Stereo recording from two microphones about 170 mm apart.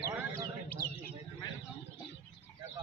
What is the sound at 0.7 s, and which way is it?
Bird, 60° left (ahead or behind).